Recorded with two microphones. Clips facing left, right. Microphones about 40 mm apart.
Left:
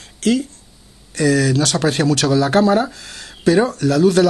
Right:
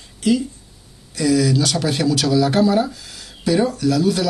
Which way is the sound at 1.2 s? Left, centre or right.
Left.